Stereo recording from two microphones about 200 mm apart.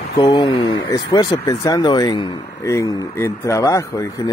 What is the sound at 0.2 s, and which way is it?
Speech, 25° left (ahead or behind).